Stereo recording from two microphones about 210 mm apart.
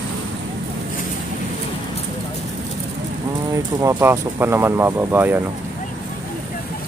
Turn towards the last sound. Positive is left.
turn(degrees=-10)  # may be behind; listen again after turning